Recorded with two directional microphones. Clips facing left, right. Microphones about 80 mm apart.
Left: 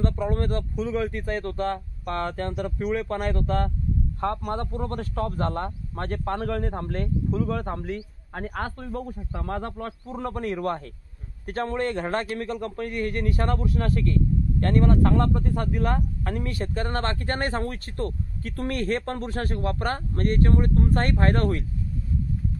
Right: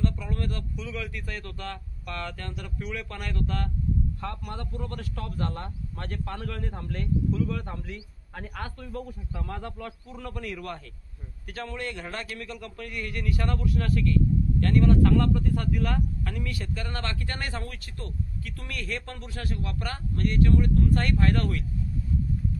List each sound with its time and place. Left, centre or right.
0.0 s a man's voice: left